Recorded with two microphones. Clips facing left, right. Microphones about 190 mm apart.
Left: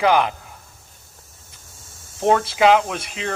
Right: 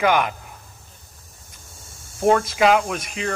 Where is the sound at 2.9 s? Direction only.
30° left (ahead or behind).